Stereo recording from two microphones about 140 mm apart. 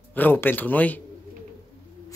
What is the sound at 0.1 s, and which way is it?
Speech, 15° left (ahead or behind).